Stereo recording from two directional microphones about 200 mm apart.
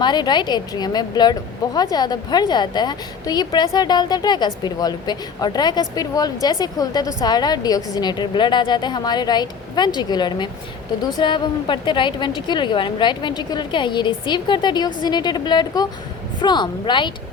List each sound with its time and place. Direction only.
0.0 s speech: 20° left (ahead or behind)